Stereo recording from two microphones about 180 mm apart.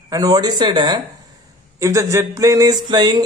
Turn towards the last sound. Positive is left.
turn(degrees=-25)  # may be behind; listen again after turning